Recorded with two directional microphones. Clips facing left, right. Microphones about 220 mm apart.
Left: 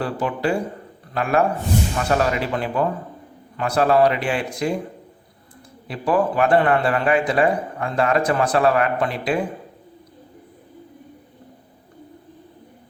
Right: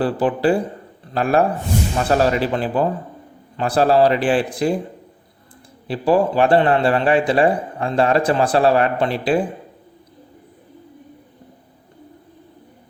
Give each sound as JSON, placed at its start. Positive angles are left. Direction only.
{"t": 0.0, "sound": "a man's voice", "side_deg": -35}
{"t": 5.9, "sound": "a man's voice", "side_deg": -30}